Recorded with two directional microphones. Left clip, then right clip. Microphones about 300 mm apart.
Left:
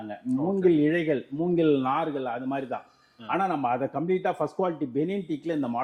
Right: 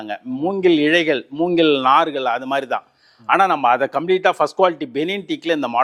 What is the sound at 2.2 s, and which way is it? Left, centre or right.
A man's voice, centre.